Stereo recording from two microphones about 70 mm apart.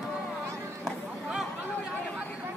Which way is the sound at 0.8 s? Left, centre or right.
Centre.